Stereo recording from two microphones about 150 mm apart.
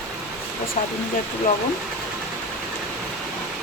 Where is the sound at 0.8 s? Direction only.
55° left (ahead or behind).